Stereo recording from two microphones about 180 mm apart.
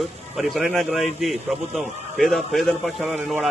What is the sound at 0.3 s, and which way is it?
A man's voice, centre (ahead or behind).